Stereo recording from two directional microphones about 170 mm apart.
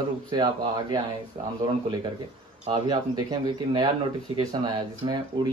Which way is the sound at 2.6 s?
25° right (ahead or behind).